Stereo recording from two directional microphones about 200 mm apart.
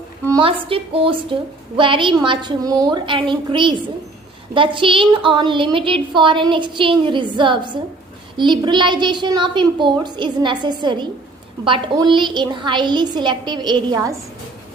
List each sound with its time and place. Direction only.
0.3 s a woman's voice: 25° right (ahead or behind)